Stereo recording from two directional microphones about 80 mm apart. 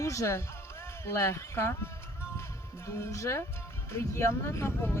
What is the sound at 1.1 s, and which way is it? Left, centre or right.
Speech, left.